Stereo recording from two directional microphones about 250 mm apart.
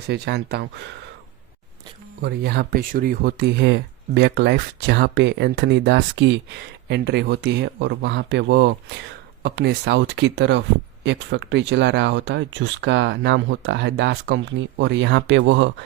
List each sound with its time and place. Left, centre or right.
0.1 s speech: right
2.2 s speech: right